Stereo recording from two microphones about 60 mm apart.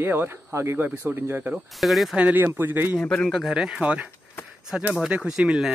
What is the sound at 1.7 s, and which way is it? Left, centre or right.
Speech, centre.